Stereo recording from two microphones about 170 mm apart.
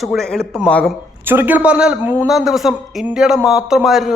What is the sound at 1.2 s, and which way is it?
A man's voice, 10° right (ahead or behind).